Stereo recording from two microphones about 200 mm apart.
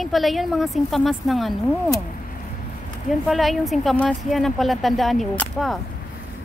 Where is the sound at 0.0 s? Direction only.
Centre (ahead or behind).